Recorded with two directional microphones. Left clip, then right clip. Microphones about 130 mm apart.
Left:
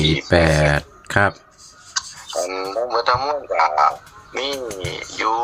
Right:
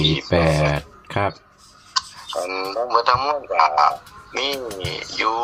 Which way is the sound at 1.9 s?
10° right (ahead or behind).